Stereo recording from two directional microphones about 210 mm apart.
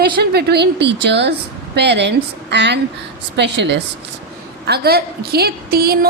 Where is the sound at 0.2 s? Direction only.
50° right (ahead or behind).